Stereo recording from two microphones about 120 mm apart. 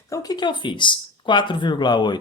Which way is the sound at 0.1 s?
30° left (ahead or behind).